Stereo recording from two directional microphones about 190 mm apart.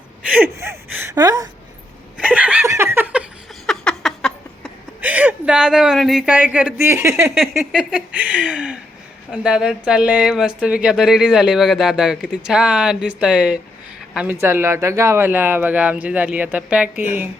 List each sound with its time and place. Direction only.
0.6 s gasp: 15° right (ahead or behind)
2.1 s laughter: 5° right (ahead or behind)
3.7 s a sound: centre (ahead or behind)
4.9 s a woman's voice: 10° right (ahead or behind)